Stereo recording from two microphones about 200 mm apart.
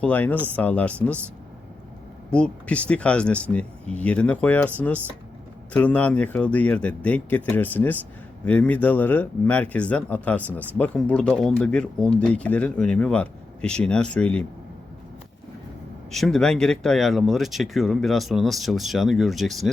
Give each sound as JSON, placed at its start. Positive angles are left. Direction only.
{"t": 0.0, "sound": "speech", "side_deg": 10}
{"t": 2.3, "sound": "speech", "side_deg": 5}
{"t": 16.1, "sound": "speech", "side_deg": 0}